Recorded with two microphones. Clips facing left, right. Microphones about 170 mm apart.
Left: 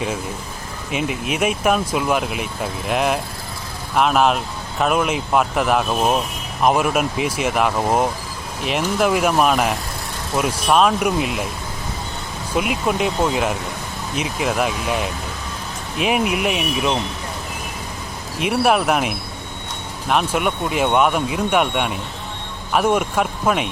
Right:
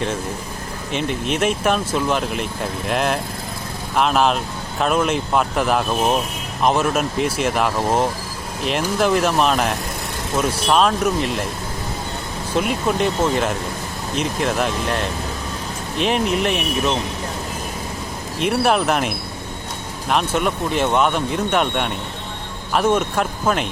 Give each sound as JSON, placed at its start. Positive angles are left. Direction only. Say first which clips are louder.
{"t": 0.9, "sound": "speech", "louder": "right 1 dB", "side_deg": 5}
{"t": 12.5, "sound": "speech", "louder": "even", "side_deg": 5}
{"t": 18.3, "sound": "speech", "louder": "even", "side_deg": 5}